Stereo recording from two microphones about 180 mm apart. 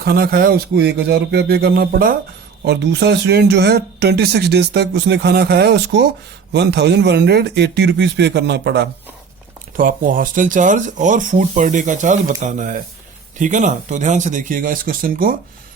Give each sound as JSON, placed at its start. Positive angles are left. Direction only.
{"t": 0.0, "sound": "speech", "side_deg": -60}
{"t": 2.6, "sound": "speech", "side_deg": -70}
{"t": 9.7, "sound": "speech", "side_deg": -50}